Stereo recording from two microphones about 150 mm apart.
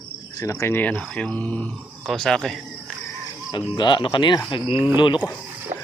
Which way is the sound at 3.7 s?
30° left (ahead or behind).